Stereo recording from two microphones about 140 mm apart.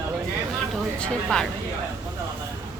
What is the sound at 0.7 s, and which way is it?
Speech, 5° left (ahead or behind).